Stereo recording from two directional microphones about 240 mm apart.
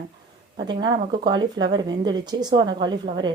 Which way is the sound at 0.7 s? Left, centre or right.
Centre.